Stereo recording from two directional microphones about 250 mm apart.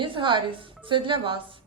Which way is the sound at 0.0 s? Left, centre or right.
Centre.